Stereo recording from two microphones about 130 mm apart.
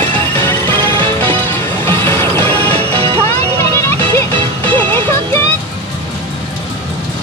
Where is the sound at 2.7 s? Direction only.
45° right (ahead or behind).